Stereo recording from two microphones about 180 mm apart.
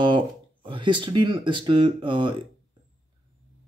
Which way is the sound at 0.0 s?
30° right (ahead or behind).